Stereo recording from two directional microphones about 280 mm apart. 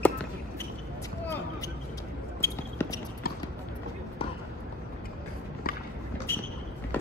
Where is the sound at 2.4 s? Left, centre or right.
Centre.